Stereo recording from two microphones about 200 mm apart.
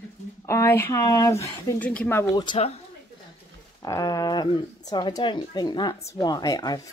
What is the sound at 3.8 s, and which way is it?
Speech, 15° left (ahead or behind).